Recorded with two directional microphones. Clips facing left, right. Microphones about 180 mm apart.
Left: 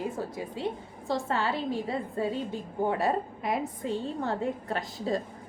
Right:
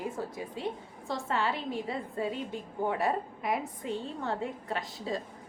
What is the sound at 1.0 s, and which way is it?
A woman's voice, 35° left (ahead or behind).